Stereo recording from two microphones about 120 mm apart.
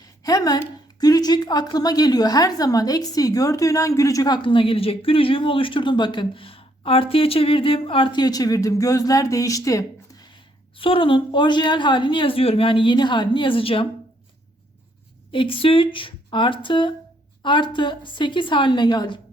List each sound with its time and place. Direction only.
0.2 s a woman's voice: 30° left (ahead or behind)
4.4 s speech: 50° left (ahead or behind); by 10.2 s 30° left (ahead or behind)
10.8 s speech: 45° left (ahead or behind)
15.3 s a woman's voice: 45° left (ahead or behind)